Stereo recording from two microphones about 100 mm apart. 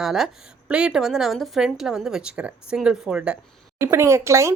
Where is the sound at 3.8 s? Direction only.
25° right (ahead or behind).